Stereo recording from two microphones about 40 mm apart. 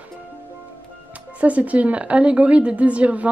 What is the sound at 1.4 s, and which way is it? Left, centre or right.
A woman's voice, right.